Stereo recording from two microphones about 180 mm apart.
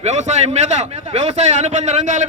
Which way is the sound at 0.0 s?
40° right (ahead or behind).